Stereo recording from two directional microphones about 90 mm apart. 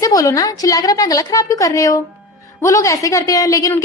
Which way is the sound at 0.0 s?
40° left (ahead or behind).